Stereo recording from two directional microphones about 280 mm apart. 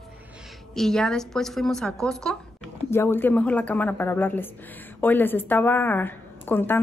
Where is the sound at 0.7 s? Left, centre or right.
Centre.